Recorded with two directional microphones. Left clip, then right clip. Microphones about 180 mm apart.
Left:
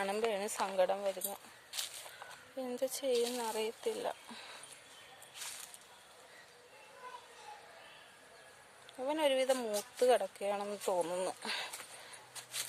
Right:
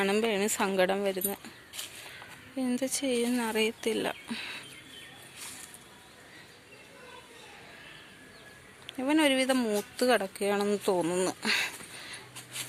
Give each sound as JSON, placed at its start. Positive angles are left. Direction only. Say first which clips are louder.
{"t": 0.0, "sound": "speech", "louder": "right 7 dB", "side_deg": 15}
{"t": 9.0, "sound": "speech", "louder": "right 6 dB", "side_deg": 10}